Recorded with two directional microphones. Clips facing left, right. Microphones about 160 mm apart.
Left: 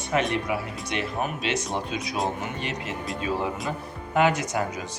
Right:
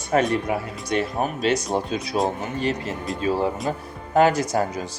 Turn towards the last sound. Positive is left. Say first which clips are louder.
# right 5 dB
turn(degrees=-35)  # may be behind; listen again after turning